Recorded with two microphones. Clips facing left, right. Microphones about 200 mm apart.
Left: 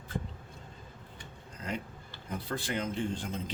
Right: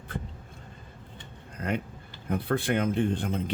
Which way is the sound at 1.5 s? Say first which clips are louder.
Right 7 dB; 60° right (ahead or behind).